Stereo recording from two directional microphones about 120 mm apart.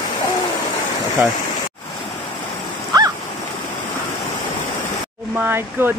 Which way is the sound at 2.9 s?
30° right (ahead or behind).